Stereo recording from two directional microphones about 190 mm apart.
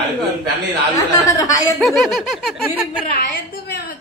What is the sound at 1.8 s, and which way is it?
Snicker, centre (ahead or behind).